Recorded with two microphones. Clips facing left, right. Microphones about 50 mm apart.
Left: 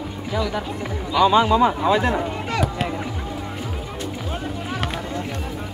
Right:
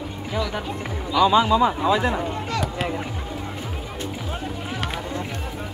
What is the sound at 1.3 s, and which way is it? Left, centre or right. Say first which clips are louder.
Speech: left 2 dB; left.